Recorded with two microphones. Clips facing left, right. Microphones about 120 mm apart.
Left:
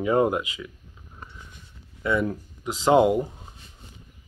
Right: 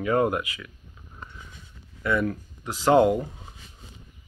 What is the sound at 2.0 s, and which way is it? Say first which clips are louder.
Speech: left 1 dB; 20° left (ahead or behind).